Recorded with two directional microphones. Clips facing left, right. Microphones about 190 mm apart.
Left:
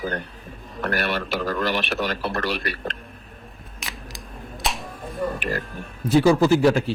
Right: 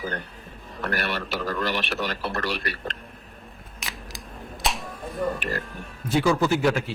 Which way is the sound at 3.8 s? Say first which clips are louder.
Left 1 dB; centre (ahead or behind).